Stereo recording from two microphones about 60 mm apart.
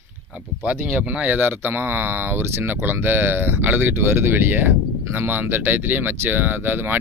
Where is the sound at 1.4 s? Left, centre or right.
Right.